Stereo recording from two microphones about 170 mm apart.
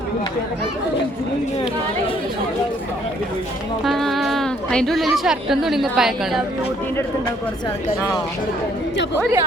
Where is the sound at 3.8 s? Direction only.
Centre (ahead or behind).